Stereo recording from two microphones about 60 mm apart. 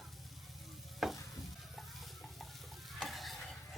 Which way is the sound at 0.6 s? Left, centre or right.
Centre.